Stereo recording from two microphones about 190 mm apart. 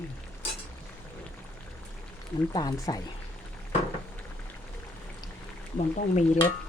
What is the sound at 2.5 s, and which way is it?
Stir, 20° left (ahead or behind).